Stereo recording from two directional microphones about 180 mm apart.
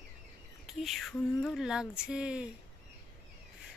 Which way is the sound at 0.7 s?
Centre (ahead or behind).